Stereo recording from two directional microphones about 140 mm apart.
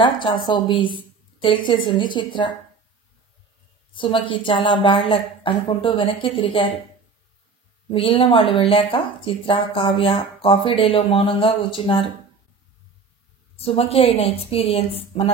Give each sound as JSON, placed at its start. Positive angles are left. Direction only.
{"t": 0.0, "sound": "a woman's voice", "side_deg": 35}
{"t": 3.9, "sound": "speech", "side_deg": 35}
{"t": 7.9, "sound": "speech", "side_deg": 40}
{"t": 13.6, "sound": "a woman's voice", "side_deg": 45}